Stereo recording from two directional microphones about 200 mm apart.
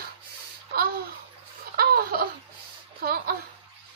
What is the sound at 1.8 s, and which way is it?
Laughter, 50° right (ahead or behind).